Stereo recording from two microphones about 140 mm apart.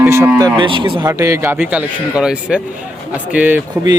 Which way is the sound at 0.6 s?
35° right (ahead or behind).